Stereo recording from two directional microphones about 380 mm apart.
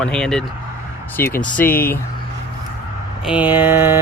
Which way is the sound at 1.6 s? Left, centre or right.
Left.